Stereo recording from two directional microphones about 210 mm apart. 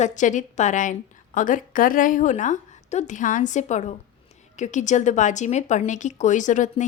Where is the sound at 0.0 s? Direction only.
35° left (ahead or behind).